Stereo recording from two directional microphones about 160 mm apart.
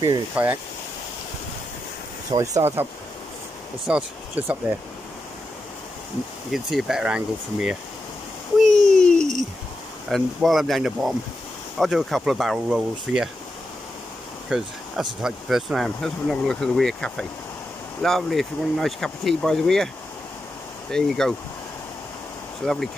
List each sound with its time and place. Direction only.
0.4 s speech: 10° right (ahead or behind)
2.3 s speech: 20° right (ahead or behind)
6.5 s speech: centre (ahead or behind)
8.5 s a sound: centre (ahead or behind)
10.0 s speech: centre (ahead or behind)
14.5 s speech: 5° right (ahead or behind)
20.9 s speech: 5° left (ahead or behind)
22.6 s speech: 5° left (ahead or behind)